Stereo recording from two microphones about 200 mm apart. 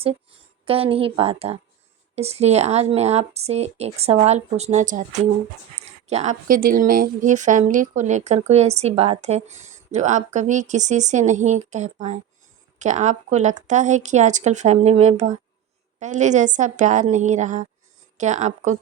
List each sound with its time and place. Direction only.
0.6 s a woman's voice: 30° right (ahead or behind)